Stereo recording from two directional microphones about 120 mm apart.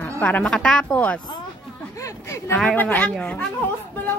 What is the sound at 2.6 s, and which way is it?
Speech, 10° left (ahead or behind).